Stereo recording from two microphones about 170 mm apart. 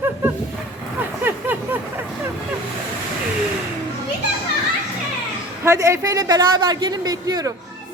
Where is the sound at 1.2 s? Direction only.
10° right (ahead or behind).